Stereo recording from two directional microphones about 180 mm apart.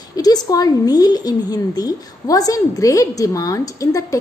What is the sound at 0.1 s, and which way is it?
A woman's voice, 20° left (ahead or behind).